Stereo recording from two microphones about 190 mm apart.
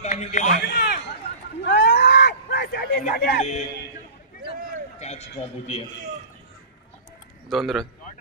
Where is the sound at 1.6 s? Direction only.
65° left (ahead or behind).